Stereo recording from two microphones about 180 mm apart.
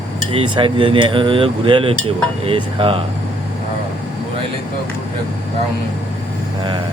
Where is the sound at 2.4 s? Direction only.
30° right (ahead or behind).